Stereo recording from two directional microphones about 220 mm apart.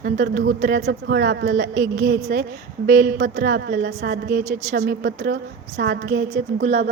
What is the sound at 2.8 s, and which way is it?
A woman's voice, 40° right (ahead or behind).